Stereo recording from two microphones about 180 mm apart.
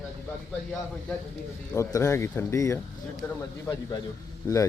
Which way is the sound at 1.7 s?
15° left (ahead or behind).